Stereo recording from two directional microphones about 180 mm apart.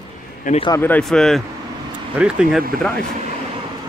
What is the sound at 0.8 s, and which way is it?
Speech, 5° left (ahead or behind).